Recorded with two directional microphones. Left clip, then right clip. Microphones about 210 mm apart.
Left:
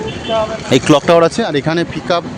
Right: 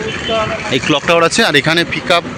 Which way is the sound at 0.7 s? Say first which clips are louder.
Left 4 dB; 30° left (ahead or behind).